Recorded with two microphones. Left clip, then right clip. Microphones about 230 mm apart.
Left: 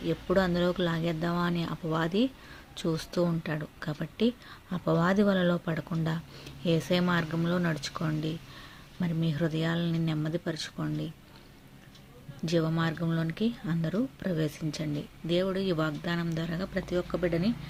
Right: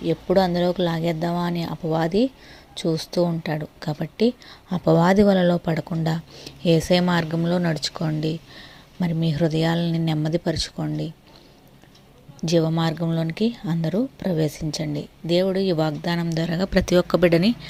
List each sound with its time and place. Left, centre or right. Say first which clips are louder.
0.0 s speech: right 8 dB; centre
12.4 s speech: right 8 dB; right